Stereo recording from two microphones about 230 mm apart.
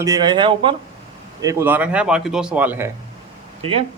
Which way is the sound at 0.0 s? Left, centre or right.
Centre.